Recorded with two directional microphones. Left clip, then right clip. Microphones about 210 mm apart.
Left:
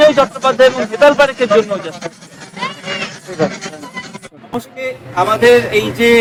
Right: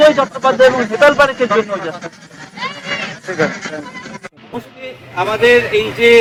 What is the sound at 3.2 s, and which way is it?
Speech, centre (ahead or behind).